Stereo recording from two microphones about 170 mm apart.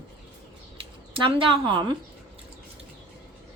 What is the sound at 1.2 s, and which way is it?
Speech, 30° right (ahead or behind).